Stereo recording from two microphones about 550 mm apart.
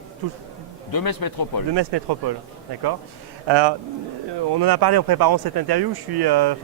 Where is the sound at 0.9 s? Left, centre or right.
Left.